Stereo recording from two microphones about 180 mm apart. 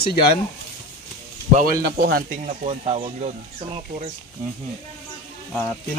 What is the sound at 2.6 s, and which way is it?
Speech, 35° right (ahead or behind).